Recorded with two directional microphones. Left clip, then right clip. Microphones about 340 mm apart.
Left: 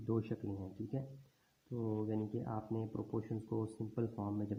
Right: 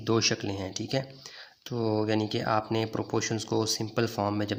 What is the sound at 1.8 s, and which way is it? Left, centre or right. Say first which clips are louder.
Speech: right 13 dB; right.